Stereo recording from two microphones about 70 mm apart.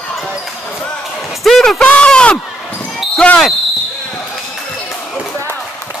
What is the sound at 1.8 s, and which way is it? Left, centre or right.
Speech, centre.